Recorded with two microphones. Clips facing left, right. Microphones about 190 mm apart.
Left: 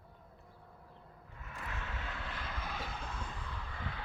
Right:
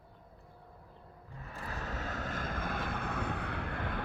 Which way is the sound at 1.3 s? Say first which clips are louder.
Right 3 dB; 35° right (ahead or behind).